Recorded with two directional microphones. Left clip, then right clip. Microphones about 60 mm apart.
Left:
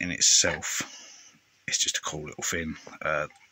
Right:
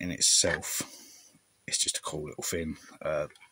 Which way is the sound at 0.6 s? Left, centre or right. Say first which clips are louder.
Left 4 dB; right.